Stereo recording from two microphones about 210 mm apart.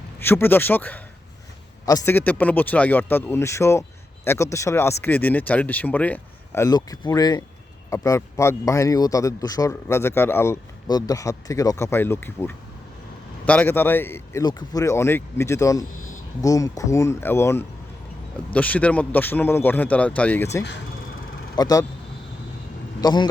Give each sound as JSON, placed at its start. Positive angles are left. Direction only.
{"t": 0.2, "sound": "speech", "side_deg": 10}
{"t": 23.0, "sound": "speech", "side_deg": 20}